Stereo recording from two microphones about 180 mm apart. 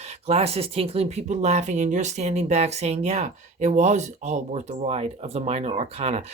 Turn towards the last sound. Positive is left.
turn(degrees=-35)  # may be behind; listen again after turning